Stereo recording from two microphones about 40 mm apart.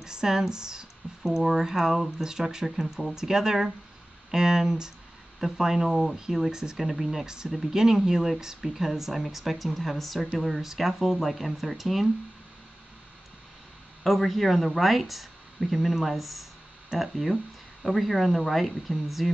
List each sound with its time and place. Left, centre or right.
0.0 s speech: centre
6.8 s speech: centre
14.0 s speech: centre